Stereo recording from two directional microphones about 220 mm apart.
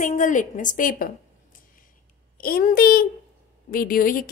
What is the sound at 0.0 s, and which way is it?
A woman's voice, 35° left (ahead or behind).